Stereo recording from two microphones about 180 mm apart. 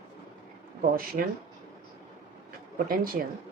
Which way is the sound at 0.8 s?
50° right (ahead or behind).